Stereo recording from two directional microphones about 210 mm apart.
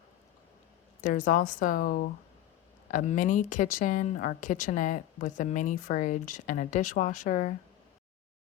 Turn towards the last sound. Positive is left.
turn(degrees=35)  # may be behind; listen again after turning